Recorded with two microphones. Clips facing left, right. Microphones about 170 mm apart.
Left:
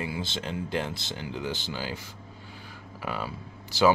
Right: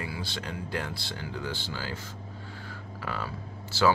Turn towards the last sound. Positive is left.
turn(degrees=15)  # may be behind; listen again after turning